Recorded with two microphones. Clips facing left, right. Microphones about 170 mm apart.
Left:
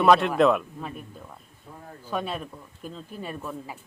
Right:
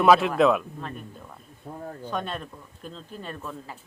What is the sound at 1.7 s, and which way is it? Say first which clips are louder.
Speech: right 7 dB; 45° right (ahead or behind).